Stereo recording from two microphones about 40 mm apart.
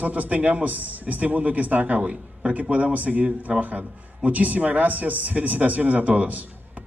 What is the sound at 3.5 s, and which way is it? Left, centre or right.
Speech, right.